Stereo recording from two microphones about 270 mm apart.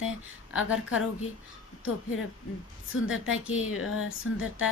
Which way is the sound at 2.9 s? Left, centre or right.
Left.